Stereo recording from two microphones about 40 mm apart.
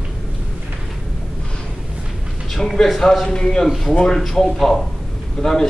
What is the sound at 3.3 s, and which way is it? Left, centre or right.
Speech, left.